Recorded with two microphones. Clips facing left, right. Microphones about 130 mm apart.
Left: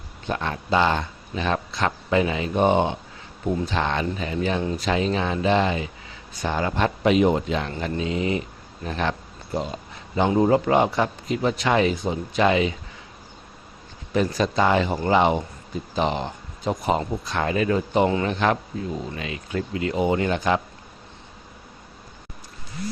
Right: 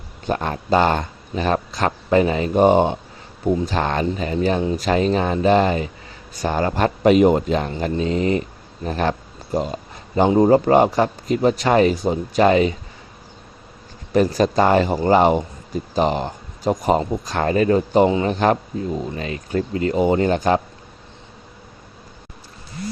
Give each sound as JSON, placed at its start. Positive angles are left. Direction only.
{"t": 0.3, "sound": "speech", "side_deg": -40}
{"t": 14.1, "sound": "speech", "side_deg": -45}